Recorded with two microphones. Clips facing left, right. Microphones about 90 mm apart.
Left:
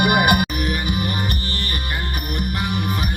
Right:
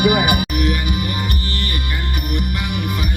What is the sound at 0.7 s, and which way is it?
Music, 40° left (ahead or behind).